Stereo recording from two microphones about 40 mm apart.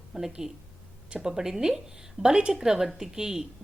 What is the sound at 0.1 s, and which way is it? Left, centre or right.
A woman's voice, centre.